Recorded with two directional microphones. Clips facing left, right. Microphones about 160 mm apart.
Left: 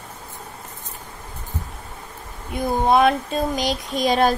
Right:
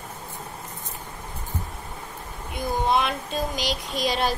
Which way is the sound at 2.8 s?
50° left (ahead or behind).